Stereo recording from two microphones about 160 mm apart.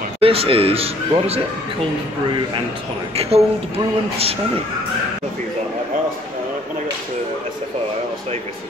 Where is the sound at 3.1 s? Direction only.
40° right (ahead or behind).